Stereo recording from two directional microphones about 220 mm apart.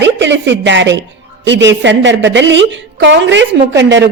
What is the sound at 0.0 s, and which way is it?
A woman's voice, 55° right (ahead or behind).